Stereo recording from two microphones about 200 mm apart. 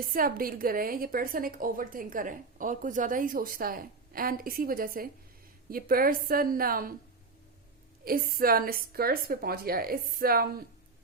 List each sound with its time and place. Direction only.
0.0 s a woman's voice: 45° right (ahead or behind)
8.0 s a woman's voice: 45° right (ahead or behind)